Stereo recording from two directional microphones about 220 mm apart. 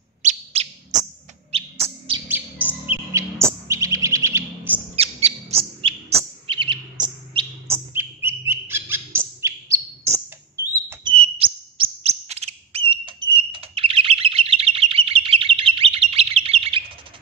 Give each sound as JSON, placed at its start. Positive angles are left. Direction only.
{"t": 0.2, "sound": "bird", "side_deg": -30}
{"t": 2.1, "sound": "bird", "side_deg": -20}
{"t": 2.9, "sound": "chirp", "side_deg": -15}
{"t": 4.9, "sound": "bird", "side_deg": -25}
{"t": 7.6, "sound": "bird", "side_deg": -10}
{"t": 11.1, "sound": "bird", "side_deg": -25}